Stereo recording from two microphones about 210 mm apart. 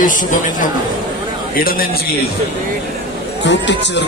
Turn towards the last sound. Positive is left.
turn(degrees=55)  # may be behind; listen again after turning